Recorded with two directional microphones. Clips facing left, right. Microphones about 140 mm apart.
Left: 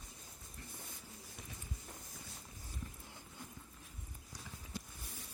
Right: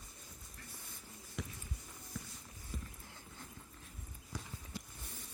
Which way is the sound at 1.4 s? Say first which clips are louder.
Right 10 dB; 90° right.